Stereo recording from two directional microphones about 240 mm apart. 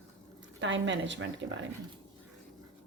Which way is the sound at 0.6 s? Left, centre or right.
Right.